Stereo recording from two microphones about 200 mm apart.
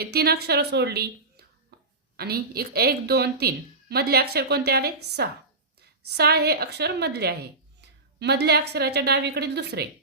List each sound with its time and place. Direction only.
0.0 s a woman's voice: 50° right (ahead or behind)
1.7 s a sound: 50° right (ahead or behind)
2.1 s a woman's voice: 50° right (ahead or behind)